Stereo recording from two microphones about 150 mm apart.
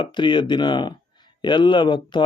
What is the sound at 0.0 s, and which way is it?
A man's voice, 30° left (ahead or behind).